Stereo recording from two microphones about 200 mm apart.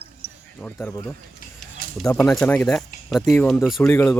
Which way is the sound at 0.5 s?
5° left (ahead or behind).